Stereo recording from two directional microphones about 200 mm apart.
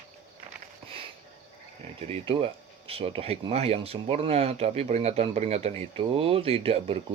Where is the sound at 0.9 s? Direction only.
25° right (ahead or behind).